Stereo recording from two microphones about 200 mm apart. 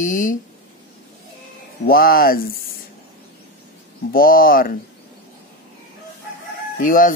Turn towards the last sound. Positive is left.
turn(degrees=40)  # may be behind; listen again after turning